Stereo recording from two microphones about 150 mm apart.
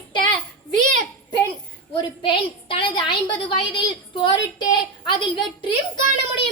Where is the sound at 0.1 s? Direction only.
30° left (ahead or behind).